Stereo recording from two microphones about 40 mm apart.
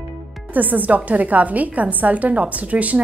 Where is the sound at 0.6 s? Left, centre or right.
Right.